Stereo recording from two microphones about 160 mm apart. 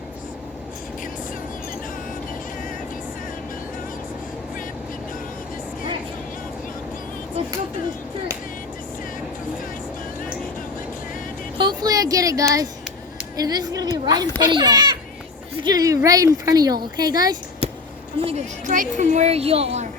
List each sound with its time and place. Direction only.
11.5 s a sound: 30° right (ahead or behind)
13.3 s a woman's voice: 25° right (ahead or behind)
18.2 s a woman's voice: 40° right (ahead or behind)